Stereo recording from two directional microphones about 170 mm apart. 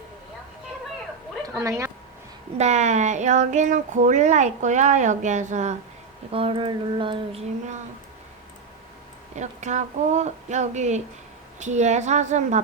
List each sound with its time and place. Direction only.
1.5 s speech: 15° right (ahead or behind)
2.6 s speech: 40° right (ahead or behind)
6.3 s a sound: 30° right (ahead or behind)
9.3 s speech: 45° right (ahead or behind)